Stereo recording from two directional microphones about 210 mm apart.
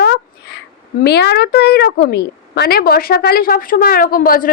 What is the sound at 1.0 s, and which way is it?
A woman's voice, 55° left (ahead or behind).